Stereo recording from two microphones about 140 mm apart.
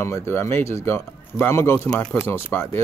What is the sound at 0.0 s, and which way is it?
Speech, 20° left (ahead or behind).